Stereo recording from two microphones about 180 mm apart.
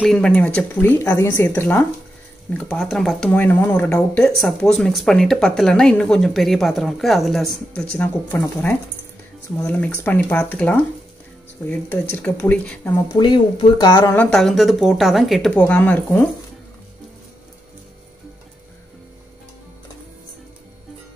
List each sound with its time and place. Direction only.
0.0 s speech: 5° left (ahead or behind)
2.5 s speech: centre (ahead or behind)
13.1 s speech: 25° left (ahead or behind)
14.1 s speech: 5° left (ahead or behind)